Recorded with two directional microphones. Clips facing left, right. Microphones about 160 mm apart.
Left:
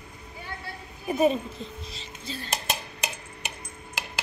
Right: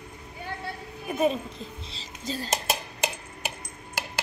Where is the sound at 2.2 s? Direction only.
40° right (ahead or behind).